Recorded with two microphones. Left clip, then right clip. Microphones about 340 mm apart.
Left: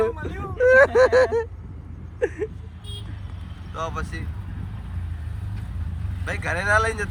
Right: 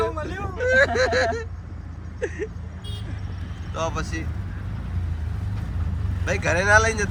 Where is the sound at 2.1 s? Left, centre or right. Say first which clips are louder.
Left 4 dB; centre.